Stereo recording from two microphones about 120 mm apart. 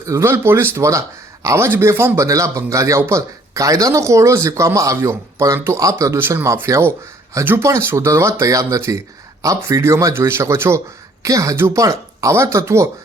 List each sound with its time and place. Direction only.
0.0 s speech: 25° right (ahead or behind)